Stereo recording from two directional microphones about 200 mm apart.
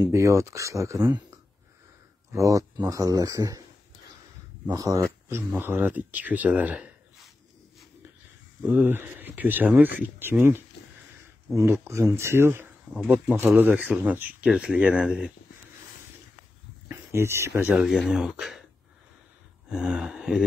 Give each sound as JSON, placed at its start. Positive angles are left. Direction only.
{"t": 0.0, "sound": "speech", "side_deg": -15}
{"t": 2.3, "sound": "speech", "side_deg": -15}
{"t": 4.6, "sound": "speech", "side_deg": -15}
{"t": 8.6, "sound": "speech", "side_deg": -10}
{"t": 11.8, "sound": "speech", "side_deg": -15}
{"t": 16.9, "sound": "a sound", "side_deg": -10}
{"t": 17.5, "sound": "speech", "side_deg": -5}
{"t": 19.7, "sound": "speech", "side_deg": -5}